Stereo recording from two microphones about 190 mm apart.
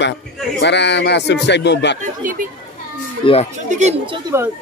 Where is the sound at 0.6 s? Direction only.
65° left (ahead or behind).